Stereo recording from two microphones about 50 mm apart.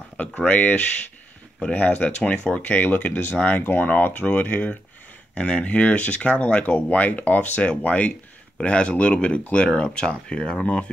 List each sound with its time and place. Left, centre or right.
0.2 s speech: left
2.5 s speech: left